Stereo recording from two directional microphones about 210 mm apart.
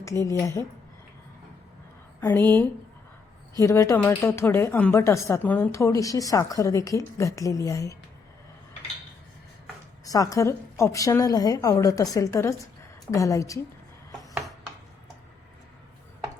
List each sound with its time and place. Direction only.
0.0 s speech: 15° left (ahead or behind)
2.2 s speech: 10° left (ahead or behind)
10.1 s speech: 15° left (ahead or behind)